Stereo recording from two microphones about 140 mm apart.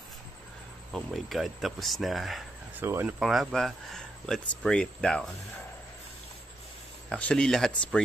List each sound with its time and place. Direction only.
0.9 s speech: centre (ahead or behind)
2.8 s speech: 15° right (ahead or behind)
3.2 s speech: centre (ahead or behind)
7.1 s speech: 5° left (ahead or behind)